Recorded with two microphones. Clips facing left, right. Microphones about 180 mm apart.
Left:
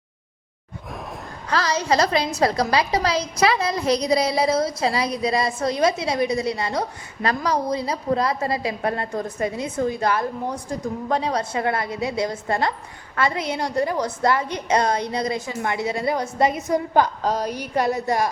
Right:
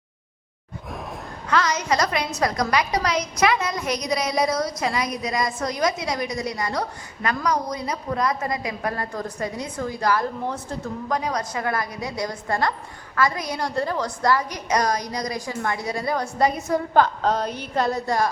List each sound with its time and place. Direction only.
1.5 s a woman's voice: 35° left (ahead or behind)
10.4 s a woman's voice: 10° left (ahead or behind)
11.1 s a woman's voice: 30° left (ahead or behind)